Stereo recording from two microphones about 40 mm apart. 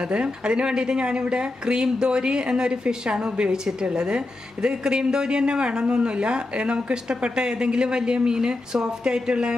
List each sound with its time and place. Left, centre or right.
0.0 s speech: right